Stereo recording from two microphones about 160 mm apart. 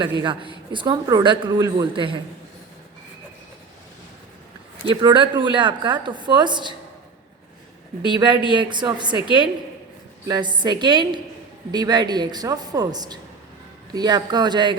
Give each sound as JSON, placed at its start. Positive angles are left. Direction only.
{"t": 0.2, "sound": "speech", "side_deg": -30}
{"t": 4.9, "sound": "a woman's voice", "side_deg": -30}
{"t": 8.0, "sound": "a woman's voice", "side_deg": -30}
{"t": 10.2, "sound": "a woman's voice", "side_deg": -25}